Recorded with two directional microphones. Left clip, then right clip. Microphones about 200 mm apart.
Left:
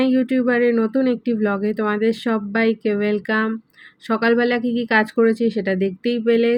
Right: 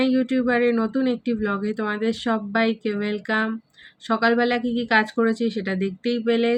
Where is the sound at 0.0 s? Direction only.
15° left (ahead or behind).